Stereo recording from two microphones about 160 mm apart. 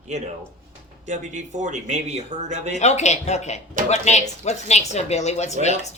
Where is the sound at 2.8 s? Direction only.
45° left (ahead or behind).